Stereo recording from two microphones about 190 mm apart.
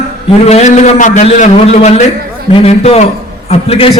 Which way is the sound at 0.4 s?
35° left (ahead or behind).